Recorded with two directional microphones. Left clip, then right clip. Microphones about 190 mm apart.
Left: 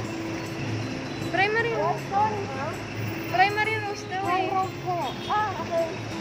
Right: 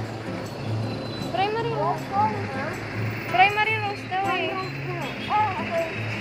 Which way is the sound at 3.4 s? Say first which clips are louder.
Right 3 dB; 15° left (ahead or behind).